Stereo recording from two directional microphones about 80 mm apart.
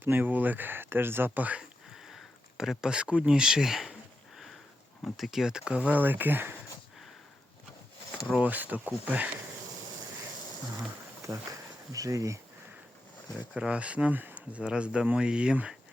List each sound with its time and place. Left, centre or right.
0.0 s speech: right
2.0 s speech: centre
5.1 s speech: centre; by 6.6 s right
8.4 s speech: right
11.2 s speech: right
13.5 s speech: centre